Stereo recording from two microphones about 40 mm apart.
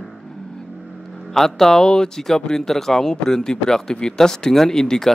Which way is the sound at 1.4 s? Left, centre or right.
Centre.